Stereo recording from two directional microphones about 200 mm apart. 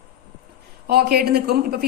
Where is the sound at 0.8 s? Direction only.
50° right (ahead or behind).